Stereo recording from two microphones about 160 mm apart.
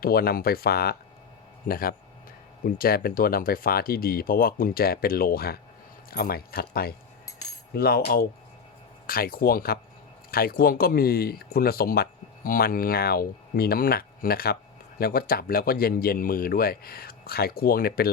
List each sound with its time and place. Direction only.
0.0 s speech: 70° left (ahead or behind)